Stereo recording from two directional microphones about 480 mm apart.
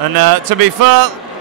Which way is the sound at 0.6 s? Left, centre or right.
Right.